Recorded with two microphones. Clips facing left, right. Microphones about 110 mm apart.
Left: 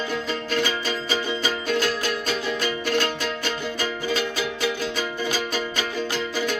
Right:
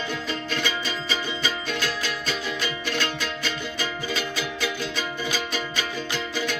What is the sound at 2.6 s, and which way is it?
Music, 45° left (ahead or behind).